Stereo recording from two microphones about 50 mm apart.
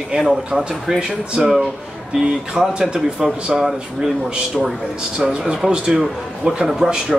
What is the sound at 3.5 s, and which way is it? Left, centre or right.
Speech, centre.